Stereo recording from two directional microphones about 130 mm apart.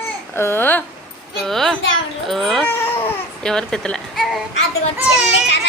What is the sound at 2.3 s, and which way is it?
Speech, centre (ahead or behind).